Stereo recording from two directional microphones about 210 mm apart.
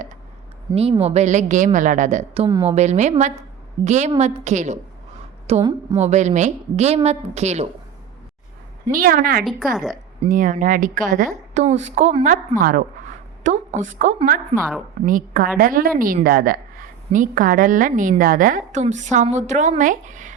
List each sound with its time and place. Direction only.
0.7 s a woman's voice: 25° right (ahead or behind)
8.9 s a woman's voice: 40° right (ahead or behind)